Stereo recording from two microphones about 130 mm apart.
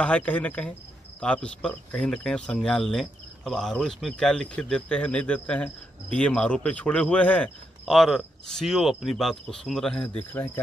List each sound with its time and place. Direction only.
0.0 s speech: 10° left (ahead or behind)
7.8 s speech: centre (ahead or behind)
10.3 s speech: 15° left (ahead or behind)